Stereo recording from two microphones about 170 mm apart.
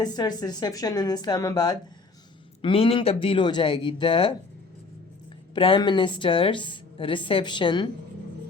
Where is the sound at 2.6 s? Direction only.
35° left (ahead or behind).